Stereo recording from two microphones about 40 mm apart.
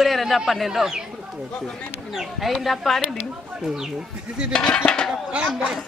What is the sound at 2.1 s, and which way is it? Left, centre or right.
Speech, centre.